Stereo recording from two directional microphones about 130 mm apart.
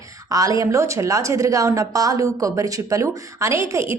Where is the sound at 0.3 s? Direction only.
25° right (ahead or behind).